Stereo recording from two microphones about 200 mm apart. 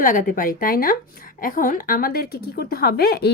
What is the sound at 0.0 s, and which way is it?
A woman's voice, 45° left (ahead or behind).